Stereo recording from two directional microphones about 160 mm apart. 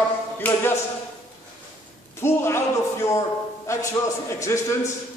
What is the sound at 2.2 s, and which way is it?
A man's voice, 15° left (ahead or behind).